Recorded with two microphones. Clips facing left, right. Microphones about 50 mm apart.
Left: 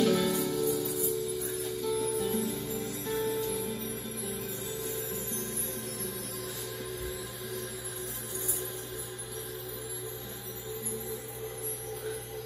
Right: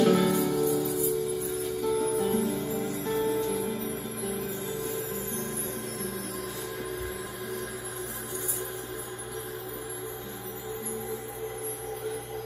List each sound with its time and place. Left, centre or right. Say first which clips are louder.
0.0 s music: right 4 dB; right